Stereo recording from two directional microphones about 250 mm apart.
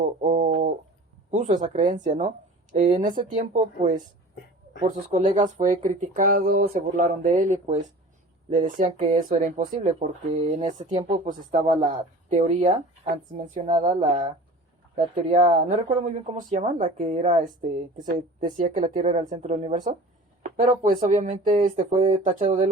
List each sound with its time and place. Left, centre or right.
0.0 s bird: right
1.3 s speech: right
14.9 s speech: right